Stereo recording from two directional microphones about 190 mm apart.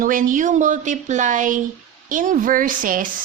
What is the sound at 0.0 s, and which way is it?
Speech, 45° right (ahead or behind).